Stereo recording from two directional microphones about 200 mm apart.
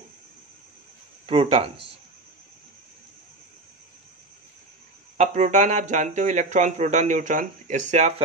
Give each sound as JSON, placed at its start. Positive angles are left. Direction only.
{"t": 1.2, "sound": "speech", "side_deg": -30}
{"t": 5.1, "sound": "speech", "side_deg": -35}